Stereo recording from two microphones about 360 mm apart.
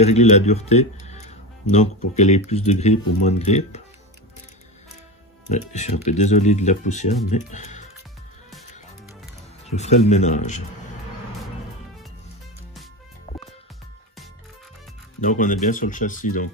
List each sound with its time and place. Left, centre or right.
0.0 s speech: centre
5.5 s speech: centre
9.7 s speech: centre
13.3 s music: centre
15.1 s speech: left